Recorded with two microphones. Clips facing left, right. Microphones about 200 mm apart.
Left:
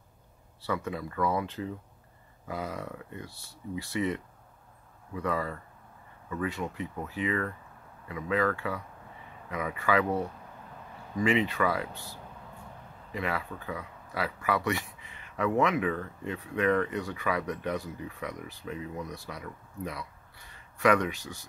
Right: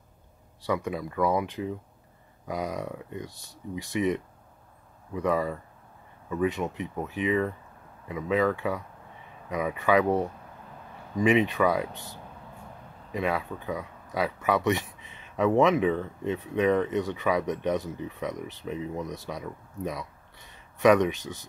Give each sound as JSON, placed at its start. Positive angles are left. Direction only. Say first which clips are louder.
{"t": 0.6, "sound": "speech", "louder": "right 4 dB", "side_deg": -15}
{"t": 11.1, "sound": "speech", "louder": "right 4 dB", "side_deg": -20}